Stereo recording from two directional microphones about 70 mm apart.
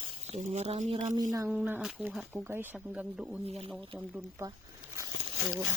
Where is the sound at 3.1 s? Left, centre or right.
Centre.